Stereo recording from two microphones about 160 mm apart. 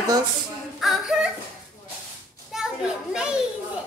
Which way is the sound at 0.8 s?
Centre (ahead or behind).